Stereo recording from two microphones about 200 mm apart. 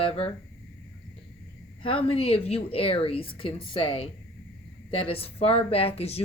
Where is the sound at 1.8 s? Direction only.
25° left (ahead or behind).